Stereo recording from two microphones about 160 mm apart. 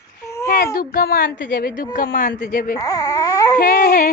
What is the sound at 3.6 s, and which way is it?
Speech, 65° left (ahead or behind).